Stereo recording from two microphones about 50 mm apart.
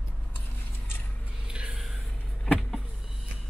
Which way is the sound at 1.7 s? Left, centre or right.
Centre.